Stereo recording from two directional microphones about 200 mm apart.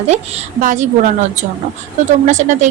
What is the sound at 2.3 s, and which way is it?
Speech, 35° right (ahead or behind).